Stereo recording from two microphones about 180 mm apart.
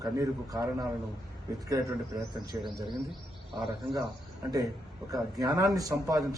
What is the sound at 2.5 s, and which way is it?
Speech, 20° right (ahead or behind).